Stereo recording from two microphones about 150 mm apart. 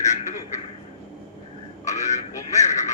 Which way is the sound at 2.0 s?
50° left (ahead or behind).